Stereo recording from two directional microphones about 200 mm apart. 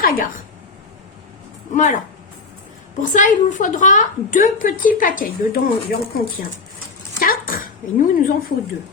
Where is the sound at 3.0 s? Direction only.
40° left (ahead or behind).